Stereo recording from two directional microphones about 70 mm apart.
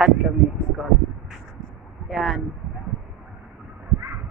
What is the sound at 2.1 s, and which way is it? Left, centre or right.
Speech, centre.